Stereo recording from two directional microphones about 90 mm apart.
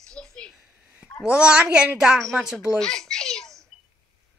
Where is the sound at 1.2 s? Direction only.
10° right (ahead or behind).